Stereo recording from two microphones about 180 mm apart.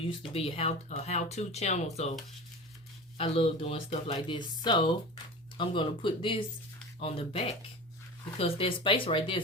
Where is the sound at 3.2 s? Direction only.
30° left (ahead or behind).